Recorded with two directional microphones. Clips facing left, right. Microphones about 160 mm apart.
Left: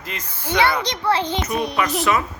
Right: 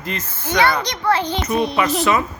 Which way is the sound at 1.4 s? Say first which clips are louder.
Right 4 dB; 10° left (ahead or behind).